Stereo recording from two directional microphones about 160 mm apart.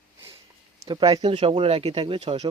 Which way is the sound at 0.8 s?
30° right (ahead or behind).